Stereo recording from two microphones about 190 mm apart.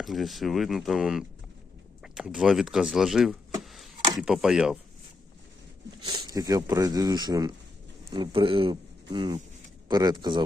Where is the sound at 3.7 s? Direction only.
Centre (ahead or behind).